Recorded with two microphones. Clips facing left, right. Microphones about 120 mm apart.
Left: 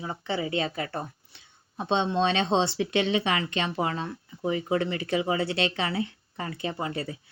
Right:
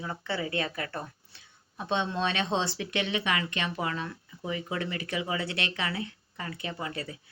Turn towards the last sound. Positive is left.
turn(degrees=30)  # may be behind; listen again after turning